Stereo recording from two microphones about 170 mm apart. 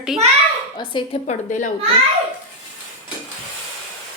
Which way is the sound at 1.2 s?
45° left (ahead or behind).